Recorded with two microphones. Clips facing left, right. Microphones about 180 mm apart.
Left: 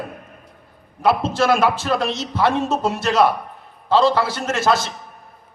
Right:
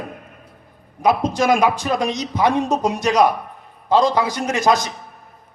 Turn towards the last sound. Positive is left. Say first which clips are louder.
# right 1 dB
turn(degrees=-15)  # may be behind; listen again after turning